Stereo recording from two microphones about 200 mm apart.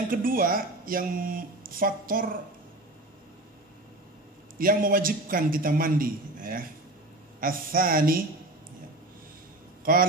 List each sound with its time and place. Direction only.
0.1 s speech: 45° right (ahead or behind)
4.6 s speech: 45° right (ahead or behind)